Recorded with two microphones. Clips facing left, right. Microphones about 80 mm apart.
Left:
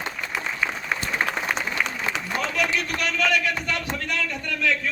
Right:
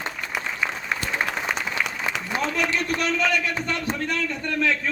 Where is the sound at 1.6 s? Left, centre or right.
Centre.